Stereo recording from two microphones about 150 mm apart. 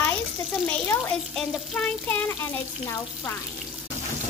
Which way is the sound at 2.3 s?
15° left (ahead or behind).